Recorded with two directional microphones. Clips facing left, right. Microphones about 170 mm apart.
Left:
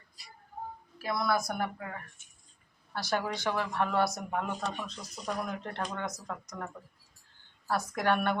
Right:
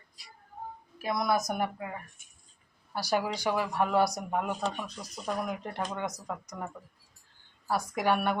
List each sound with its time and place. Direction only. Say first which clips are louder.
0.9 s speech: right 2 dB; 20° right (ahead or behind)
7.7 s speech: right 1 dB; 10° right (ahead or behind)